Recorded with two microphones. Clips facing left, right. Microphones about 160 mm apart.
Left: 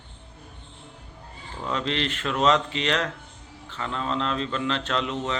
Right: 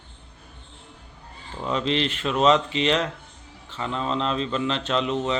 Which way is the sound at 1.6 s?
20° right (ahead or behind).